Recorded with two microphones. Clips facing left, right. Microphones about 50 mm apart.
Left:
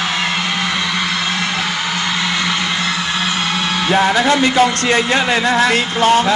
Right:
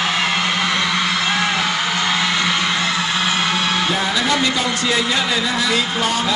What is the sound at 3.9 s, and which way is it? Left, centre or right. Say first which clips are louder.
Speech: left 7 dB; left.